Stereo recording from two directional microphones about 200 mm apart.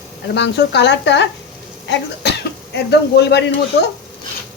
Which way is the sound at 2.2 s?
55° left (ahead or behind).